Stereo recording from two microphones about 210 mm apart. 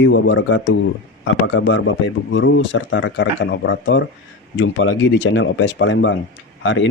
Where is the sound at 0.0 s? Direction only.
60° left (ahead or behind).